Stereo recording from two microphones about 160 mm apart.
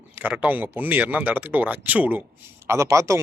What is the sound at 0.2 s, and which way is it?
A man's voice, 10° right (ahead or behind).